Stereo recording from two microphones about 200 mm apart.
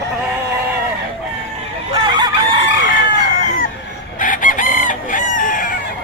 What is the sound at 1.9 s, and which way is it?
Chicken, 20° right (ahead or behind).